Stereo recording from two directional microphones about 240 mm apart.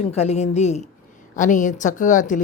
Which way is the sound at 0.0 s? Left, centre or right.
Left.